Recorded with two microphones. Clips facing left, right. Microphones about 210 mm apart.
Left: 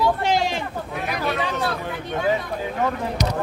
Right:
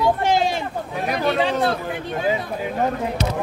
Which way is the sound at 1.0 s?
30° right (ahead or behind).